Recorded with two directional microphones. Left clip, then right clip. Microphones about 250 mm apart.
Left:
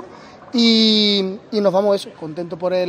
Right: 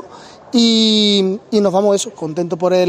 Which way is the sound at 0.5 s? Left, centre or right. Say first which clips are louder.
Right 2 dB; right.